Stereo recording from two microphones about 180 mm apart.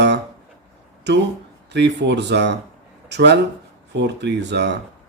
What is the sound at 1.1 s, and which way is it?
A man's voice, 70° right (ahead or behind).